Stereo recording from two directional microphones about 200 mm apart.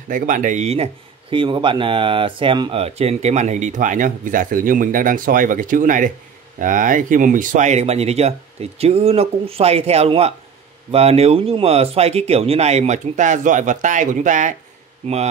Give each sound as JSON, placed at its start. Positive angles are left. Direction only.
{"t": 0.1, "sound": "speech", "side_deg": -40}